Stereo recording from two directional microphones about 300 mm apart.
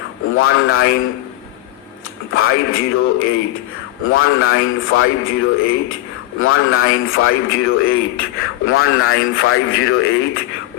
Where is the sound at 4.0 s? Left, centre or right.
Left.